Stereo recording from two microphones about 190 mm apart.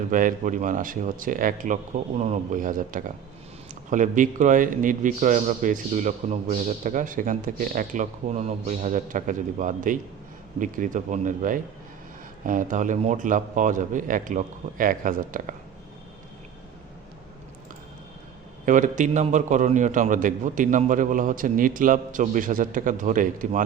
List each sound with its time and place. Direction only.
0.1 s a man's voice: 45° right (ahead or behind)
18.6 s a man's voice: 45° right (ahead or behind)